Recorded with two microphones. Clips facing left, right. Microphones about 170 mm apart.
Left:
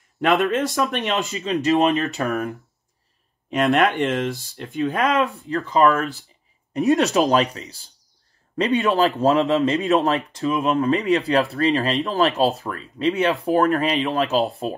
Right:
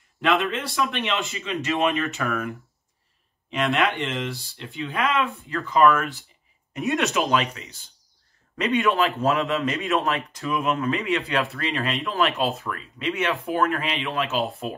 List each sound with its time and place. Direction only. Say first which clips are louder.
0.2 s speech: left 4 dB; 45° left (ahead or behind)
3.4 s speech: left 5 dB; 40° left (ahead or behind)